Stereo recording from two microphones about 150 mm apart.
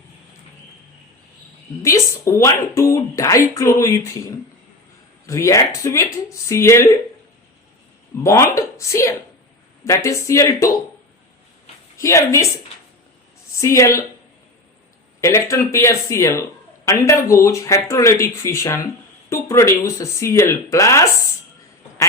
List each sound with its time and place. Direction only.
1.8 s speech: 20° left (ahead or behind)
8.2 s speech: 20° left (ahead or behind)
11.9 s speech: 20° left (ahead or behind)
13.6 s speech: 20° left (ahead or behind)
15.2 s speech: 20° left (ahead or behind)